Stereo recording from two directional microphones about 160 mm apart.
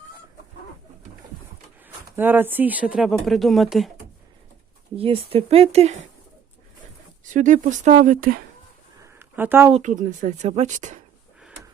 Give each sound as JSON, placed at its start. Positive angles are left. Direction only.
{"t": 2.1, "sound": "speech", "side_deg": -10}
{"t": 4.9, "sound": "speech", "side_deg": -35}
{"t": 7.3, "sound": "speech", "side_deg": -50}
{"t": 9.0, "sound": "a sound", "side_deg": -15}
{"t": 9.7, "sound": "speech", "side_deg": -50}